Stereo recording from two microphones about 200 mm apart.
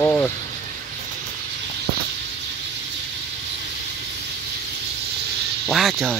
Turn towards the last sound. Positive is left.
turn(degrees=0)  # may be behind; listen again after turning